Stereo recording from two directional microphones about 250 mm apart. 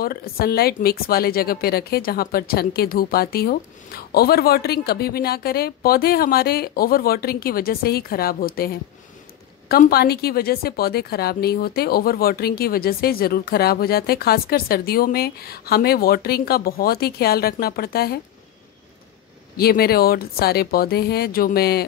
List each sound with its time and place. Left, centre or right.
0.0 s speech: left
19.5 s speech: left